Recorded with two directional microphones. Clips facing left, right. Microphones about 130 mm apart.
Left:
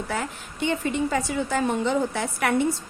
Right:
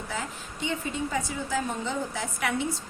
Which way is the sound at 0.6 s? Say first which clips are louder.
Left 6 dB; 65° left (ahead or behind).